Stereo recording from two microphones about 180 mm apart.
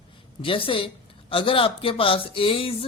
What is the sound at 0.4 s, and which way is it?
Speech, 30° left (ahead or behind).